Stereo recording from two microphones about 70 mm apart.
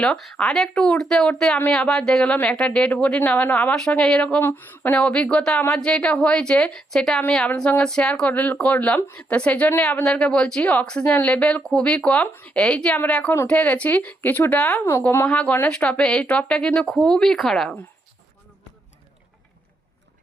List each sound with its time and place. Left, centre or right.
0.3 s speech: centre
4.4 s speech: left
4.9 s speech: centre
8.3 s speech: left; by 17.7 s centre